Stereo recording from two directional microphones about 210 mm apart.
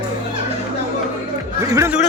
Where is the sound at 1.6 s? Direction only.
15° right (ahead or behind).